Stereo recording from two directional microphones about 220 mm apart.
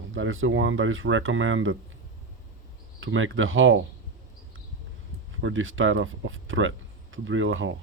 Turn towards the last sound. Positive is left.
turn(degrees=-60)  # may be behind; listen again after turning